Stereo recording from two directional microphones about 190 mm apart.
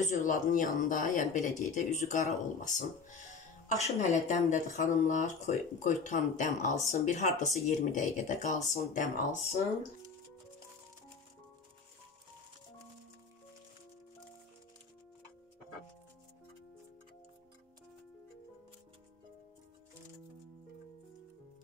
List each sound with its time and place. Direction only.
0.0 s speech: 40° left (ahead or behind)